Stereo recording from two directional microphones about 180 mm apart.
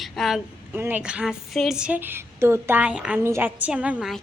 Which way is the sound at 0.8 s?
10° right (ahead or behind).